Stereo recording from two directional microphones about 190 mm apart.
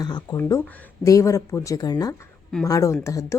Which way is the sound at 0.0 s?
20° left (ahead or behind).